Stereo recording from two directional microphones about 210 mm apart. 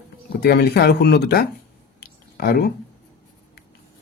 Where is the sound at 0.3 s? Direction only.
50° left (ahead or behind).